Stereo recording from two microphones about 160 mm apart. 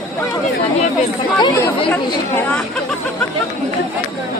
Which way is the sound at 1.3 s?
25° left (ahead or behind).